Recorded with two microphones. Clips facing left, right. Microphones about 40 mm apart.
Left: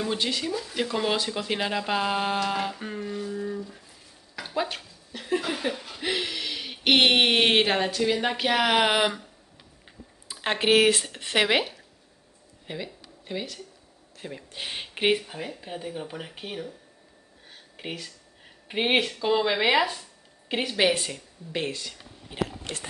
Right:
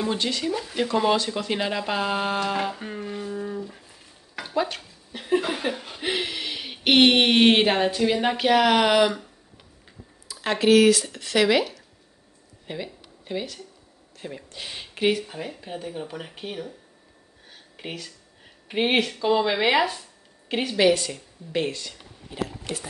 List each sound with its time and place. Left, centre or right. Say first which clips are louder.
0.1 s speech: right 2 dB; centre
0.5 s speech: right 3 dB; right
0.7 s speech: right 5 dB; centre
3.1 s a sound: even; centre
4.4 s a sound: right 3 dB; centre
5.1 s a sound: right 4 dB; centre
5.5 s speech: right 2 dB; centre
10.2 s speech: right 3 dB; left
12.6 s speech: right 2 dB; centre
14.5 s speech: left 2 dB; left
15.2 s speech: right 1 dB; centre
17.5 s a sound: even; centre
18.7 s a woman's voice: right 2 dB; centre